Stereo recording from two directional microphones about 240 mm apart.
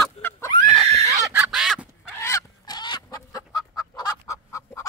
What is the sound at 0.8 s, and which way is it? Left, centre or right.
Neigh, right.